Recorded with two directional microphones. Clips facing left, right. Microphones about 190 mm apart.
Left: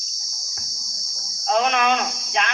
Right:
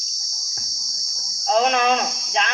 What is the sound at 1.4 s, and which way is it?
Speech, 30° right (ahead or behind).